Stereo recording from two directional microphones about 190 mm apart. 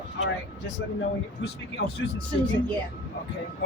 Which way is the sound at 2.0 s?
85° left.